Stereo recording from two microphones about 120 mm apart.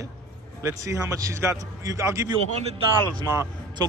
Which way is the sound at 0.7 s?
25° right (ahead or behind).